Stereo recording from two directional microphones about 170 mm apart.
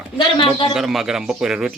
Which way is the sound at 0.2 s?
30° left (ahead or behind).